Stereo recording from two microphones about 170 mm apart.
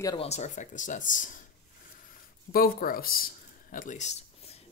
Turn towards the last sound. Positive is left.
turn(degrees=40)  # may be behind; listen again after turning